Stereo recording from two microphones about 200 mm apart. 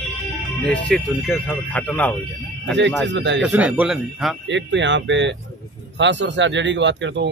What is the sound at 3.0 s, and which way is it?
Speech, 60° right (ahead or behind).